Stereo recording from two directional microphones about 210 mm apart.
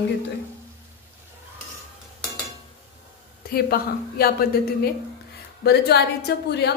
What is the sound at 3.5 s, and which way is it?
A woman's voice, 45° left (ahead or behind).